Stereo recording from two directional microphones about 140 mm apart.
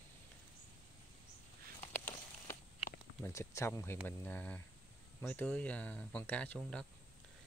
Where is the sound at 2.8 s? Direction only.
15° left (ahead or behind).